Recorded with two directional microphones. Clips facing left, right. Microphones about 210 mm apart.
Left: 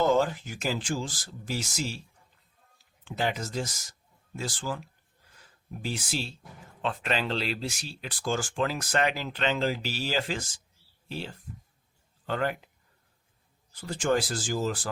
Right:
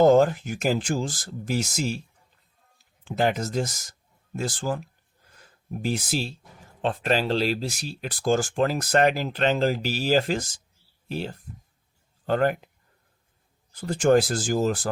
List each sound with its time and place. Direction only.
0.0 s speech: 50° right (ahead or behind)
3.0 s speech: 45° right (ahead or behind)
13.7 s speech: 45° right (ahead or behind)